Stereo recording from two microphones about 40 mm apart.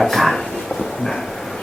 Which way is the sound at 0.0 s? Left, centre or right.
Centre.